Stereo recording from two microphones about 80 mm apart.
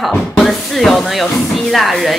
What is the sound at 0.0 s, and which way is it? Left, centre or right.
Speech, centre.